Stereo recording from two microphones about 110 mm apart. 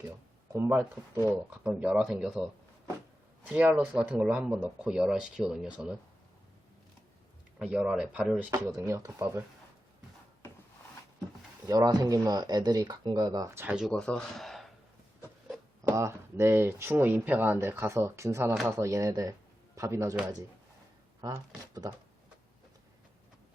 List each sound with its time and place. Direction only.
0.5 s speech: 25° right (ahead or behind)
1.3 s speech: 10° right (ahead or behind)
3.5 s speech: 15° right (ahead or behind)
7.7 s speech: 10° right (ahead or behind)
8.9 s speech: 30° right (ahead or behind)
11.6 s speech: 35° right (ahead or behind)
13.6 s speech: 10° right (ahead or behind)
13.9 s speech: 5° left (ahead or behind)
16.0 s speech: 25° right (ahead or behind)
21.2 s speech: 35° right (ahead or behind)